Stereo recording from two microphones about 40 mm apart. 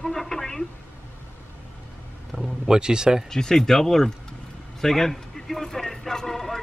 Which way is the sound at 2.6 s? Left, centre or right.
Centre.